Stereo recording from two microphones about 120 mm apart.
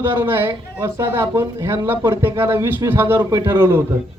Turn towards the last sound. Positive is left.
turn(degrees=-20)  # may be behind; listen again after turning